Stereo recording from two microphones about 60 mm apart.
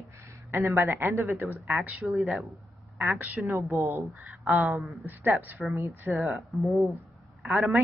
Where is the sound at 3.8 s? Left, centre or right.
Right.